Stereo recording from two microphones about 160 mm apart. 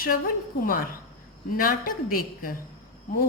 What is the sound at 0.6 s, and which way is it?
A woman's voice, 65° left (ahead or behind).